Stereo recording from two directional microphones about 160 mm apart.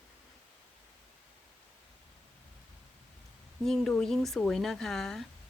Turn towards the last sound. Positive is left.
turn(degrees=0)  # may be behind; listen again after turning